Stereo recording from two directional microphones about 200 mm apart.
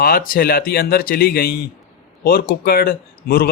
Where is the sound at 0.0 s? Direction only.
50° left (ahead or behind).